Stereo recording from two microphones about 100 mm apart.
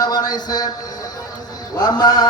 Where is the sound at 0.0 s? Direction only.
40° left (ahead or behind).